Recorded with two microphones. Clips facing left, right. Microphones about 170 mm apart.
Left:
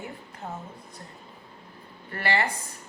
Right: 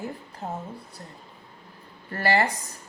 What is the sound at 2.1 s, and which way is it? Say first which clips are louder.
Speech: right 4 dB; 40° right (ahead or behind).